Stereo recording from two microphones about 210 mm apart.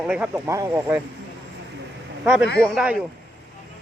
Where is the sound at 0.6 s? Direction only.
15° right (ahead or behind).